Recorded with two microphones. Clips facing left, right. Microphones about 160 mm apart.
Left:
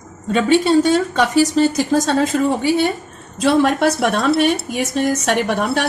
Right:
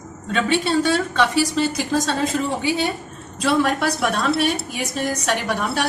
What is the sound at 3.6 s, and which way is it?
Speech, 45° left (ahead or behind).